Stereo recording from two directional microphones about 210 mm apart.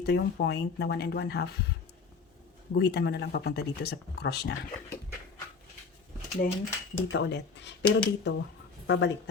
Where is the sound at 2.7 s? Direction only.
50° left (ahead or behind).